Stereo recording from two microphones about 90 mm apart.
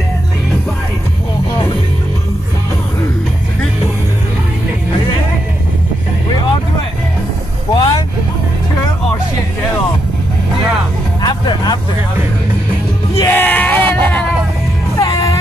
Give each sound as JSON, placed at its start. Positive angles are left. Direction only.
{"t": 7.7, "sound": "vehicle", "side_deg": 55}
{"t": 11.1, "sound": "music", "side_deg": 50}
{"t": 13.1, "sound": "music", "side_deg": 30}
{"t": 13.4, "sound": "a sound", "side_deg": 20}
{"t": 15.0, "sound": "music", "side_deg": 40}